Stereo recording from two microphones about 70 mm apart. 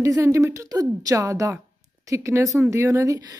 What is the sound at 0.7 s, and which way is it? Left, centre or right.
Speech, right.